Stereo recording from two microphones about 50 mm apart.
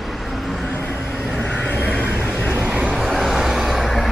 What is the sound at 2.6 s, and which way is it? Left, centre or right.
Vehicle, right.